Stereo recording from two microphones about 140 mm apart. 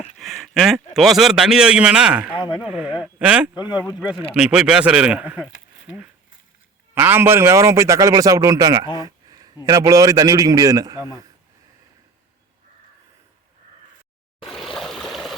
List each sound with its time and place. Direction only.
0.4 s a man's voice: centre (ahead or behind)
6.9 s a man's voice: 15° right (ahead or behind)
9.0 s a sound: 25° right (ahead or behind)
9.6 s a man's voice: 25° right (ahead or behind)
14.4 s trickle: 5° left (ahead or behind)